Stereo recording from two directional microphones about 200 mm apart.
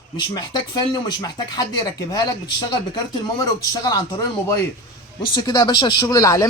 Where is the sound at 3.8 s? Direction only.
20° left (ahead or behind).